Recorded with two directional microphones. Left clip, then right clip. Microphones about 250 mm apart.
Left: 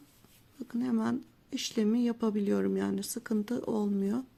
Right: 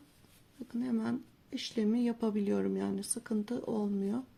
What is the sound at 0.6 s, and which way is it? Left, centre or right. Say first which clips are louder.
Speech: left 4 dB; left.